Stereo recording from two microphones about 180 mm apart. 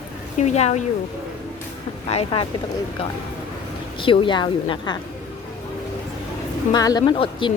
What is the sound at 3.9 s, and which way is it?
Speech, 30° left (ahead or behind).